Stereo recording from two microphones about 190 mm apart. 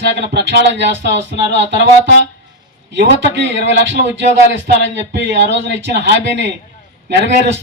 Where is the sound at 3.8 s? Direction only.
70° right (ahead or behind).